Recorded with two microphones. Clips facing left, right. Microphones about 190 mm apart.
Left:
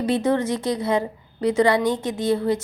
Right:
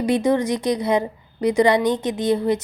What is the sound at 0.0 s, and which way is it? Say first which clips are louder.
A woman's voice: right 2 dB; 15° right (ahead or behind).